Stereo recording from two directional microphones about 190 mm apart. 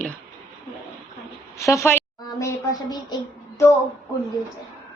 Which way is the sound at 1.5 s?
15° left (ahead or behind).